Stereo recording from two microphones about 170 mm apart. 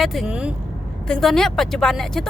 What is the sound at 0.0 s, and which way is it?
Speech, centre (ahead or behind).